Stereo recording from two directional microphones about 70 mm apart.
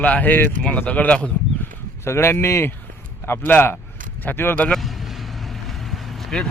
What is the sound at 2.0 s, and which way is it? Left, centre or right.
Speech, left.